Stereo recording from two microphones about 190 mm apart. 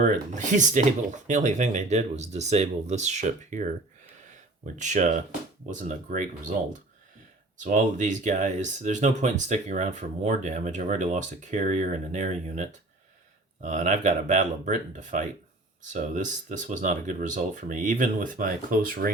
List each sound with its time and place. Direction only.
0.0 s speech: 40° right (ahead or behind)
4.8 s speech: 40° right (ahead or behind)
7.6 s speech: 40° right (ahead or behind)